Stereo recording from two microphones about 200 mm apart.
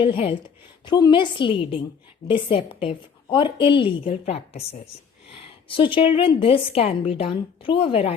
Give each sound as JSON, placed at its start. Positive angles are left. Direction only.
{"t": 0.0, "sound": "a woman's voice", "side_deg": 25}